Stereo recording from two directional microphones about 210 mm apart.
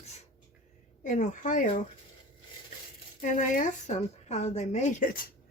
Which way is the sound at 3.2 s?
35° left (ahead or behind).